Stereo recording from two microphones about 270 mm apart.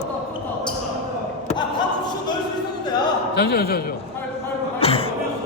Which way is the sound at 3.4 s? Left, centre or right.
Left.